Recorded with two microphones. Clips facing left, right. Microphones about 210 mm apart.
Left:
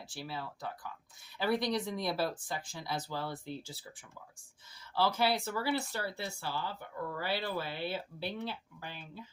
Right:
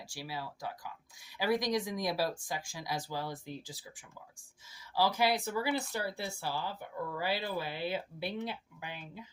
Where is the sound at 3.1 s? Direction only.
15° right (ahead or behind).